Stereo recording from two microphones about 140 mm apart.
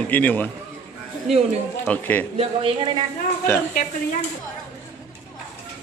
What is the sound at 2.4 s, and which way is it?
Speech, 40° right (ahead or behind).